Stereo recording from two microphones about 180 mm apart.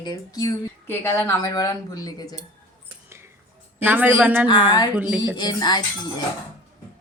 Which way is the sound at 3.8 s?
10° right (ahead or behind).